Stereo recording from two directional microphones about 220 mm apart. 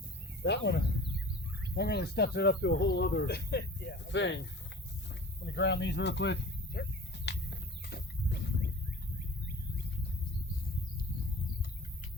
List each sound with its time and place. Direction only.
0.4 s speech: 50° left (ahead or behind)
5.5 s speech: 50° left (ahead or behind)
7.3 s a sound: 50° left (ahead or behind)